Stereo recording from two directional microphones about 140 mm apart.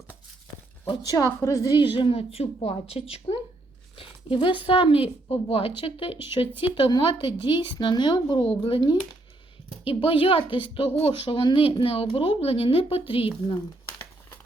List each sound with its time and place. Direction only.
0.9 s speech: 25° left (ahead or behind); by 13.2 s 45° left (ahead or behind)